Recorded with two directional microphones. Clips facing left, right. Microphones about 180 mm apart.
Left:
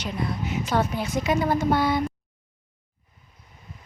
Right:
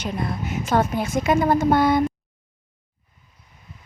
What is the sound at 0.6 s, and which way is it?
A woman's voice, 50° right (ahead or behind).